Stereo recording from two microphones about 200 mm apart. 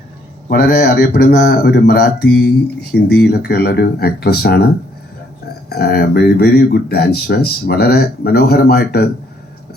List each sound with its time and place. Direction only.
0.4 s speech: 50° left (ahead or behind)
5.6 s speech: 50° left (ahead or behind)